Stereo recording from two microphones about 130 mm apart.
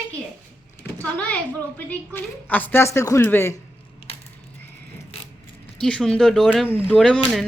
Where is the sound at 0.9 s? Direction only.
10° left (ahead or behind).